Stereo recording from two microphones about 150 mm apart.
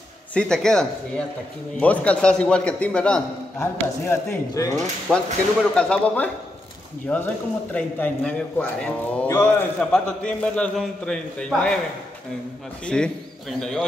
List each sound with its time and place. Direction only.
0.3 s a man's voice: 5° left (ahead or behind)
5.1 s a man's voice: 5° left (ahead or behind)
12.8 s a man's voice: 5° left (ahead or behind)